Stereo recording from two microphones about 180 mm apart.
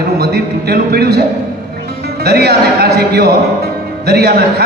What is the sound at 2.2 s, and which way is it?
A man's voice, 60° right (ahead or behind).